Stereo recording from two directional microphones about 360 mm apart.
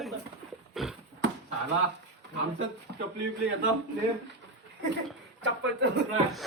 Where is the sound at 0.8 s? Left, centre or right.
Centre.